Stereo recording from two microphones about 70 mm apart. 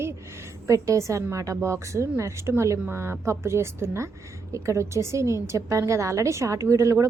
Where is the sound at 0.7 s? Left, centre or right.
Right.